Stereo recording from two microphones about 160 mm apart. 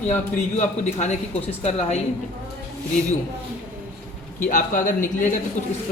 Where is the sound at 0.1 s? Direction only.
45° left (ahead or behind).